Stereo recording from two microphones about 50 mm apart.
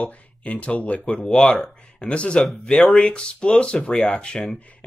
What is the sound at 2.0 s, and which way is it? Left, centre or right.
Speech, left.